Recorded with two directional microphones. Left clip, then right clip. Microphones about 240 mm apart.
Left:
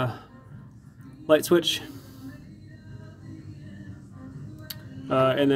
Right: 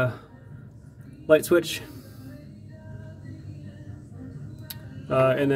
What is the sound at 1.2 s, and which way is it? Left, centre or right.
Speech, centre.